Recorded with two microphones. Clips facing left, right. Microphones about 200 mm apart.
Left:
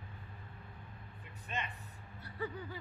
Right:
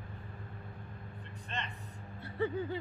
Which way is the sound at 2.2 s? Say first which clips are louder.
Right 7 dB; 25° right (ahead or behind).